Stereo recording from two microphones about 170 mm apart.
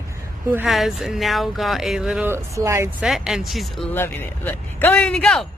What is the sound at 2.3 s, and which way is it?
Speech, 15° right (ahead or behind).